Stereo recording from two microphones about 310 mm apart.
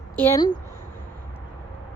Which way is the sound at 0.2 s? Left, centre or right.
Centre.